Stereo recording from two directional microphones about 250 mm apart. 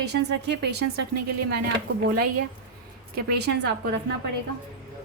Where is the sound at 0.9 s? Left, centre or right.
Right.